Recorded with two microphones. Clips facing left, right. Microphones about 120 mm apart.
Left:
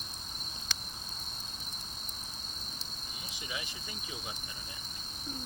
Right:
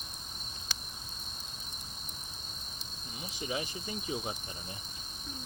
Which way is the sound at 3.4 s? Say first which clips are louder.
Right 7 dB; 30° right (ahead or behind).